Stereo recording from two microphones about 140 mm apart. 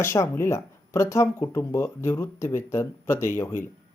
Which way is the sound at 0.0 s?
20° left (ahead or behind).